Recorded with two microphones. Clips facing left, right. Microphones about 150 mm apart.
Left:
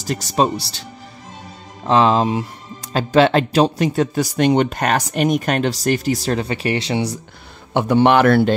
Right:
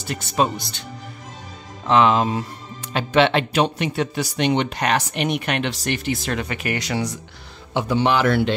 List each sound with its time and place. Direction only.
0.0 s speech: 40° left (ahead or behind)
1.9 s speech: 35° left (ahead or behind)
7.7 s a man's voice: 55° left (ahead or behind)